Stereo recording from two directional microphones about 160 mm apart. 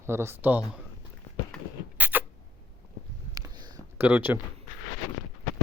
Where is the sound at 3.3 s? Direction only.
25° right (ahead or behind).